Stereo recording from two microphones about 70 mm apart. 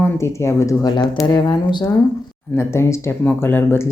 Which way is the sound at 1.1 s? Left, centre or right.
Left.